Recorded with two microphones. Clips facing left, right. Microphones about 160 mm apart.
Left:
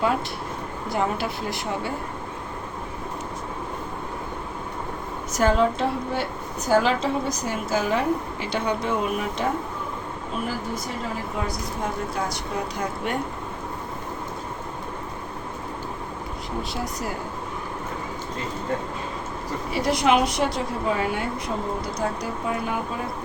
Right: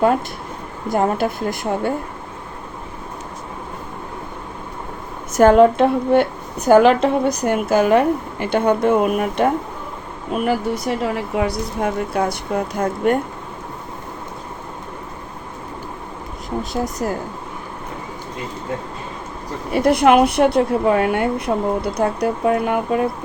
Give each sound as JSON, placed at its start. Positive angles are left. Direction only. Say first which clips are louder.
{"t": 0.9, "sound": "a woman's voice", "louder": "right 7 dB", "side_deg": -50}
{"t": 5.3, "sound": "a woman's voice", "louder": "right 10 dB", "side_deg": -55}
{"t": 19.7, "sound": "a woman's voice", "louder": "right 8 dB", "side_deg": -55}